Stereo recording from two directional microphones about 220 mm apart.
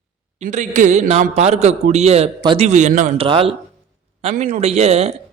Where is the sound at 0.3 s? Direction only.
35° right (ahead or behind).